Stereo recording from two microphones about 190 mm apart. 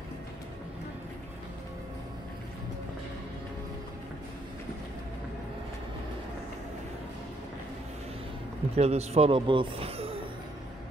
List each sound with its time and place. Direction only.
8.7 s speech: 35° right (ahead or behind)